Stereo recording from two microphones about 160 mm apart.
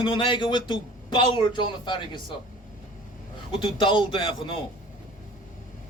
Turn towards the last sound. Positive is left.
turn(degrees=30)  # may be behind; listen again after turning